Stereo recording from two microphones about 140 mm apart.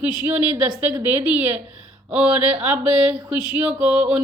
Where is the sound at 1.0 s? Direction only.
10° right (ahead or behind).